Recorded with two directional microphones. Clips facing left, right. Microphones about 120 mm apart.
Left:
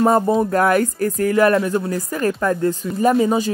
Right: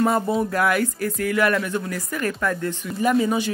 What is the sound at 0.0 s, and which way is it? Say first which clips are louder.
Speech: left 5 dB; 35° left (ahead or behind).